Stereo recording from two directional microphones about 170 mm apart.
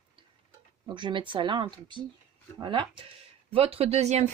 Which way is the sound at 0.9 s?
30° right (ahead or behind).